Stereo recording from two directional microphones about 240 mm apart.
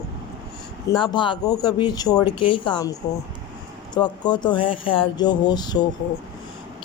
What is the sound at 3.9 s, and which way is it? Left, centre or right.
Speech, centre.